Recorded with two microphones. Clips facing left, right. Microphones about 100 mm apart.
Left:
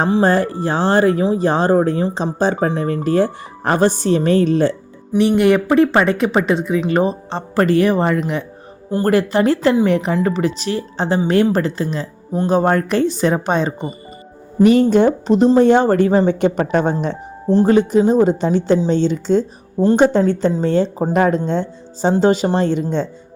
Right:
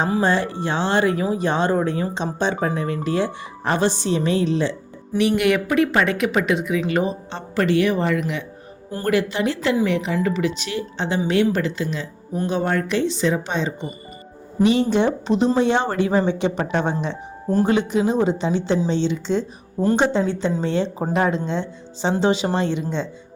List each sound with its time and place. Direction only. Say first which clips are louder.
0.0 s speech: left 5 dB; 40° left (ahead or behind)
5.4 s speech: left 6 dB; 35° left (ahead or behind)